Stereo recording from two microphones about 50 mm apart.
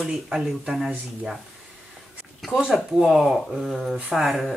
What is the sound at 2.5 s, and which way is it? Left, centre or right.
Speech, centre.